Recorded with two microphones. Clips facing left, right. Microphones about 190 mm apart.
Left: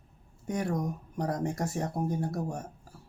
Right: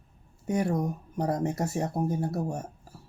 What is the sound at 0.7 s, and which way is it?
Speech, 25° right (ahead or behind).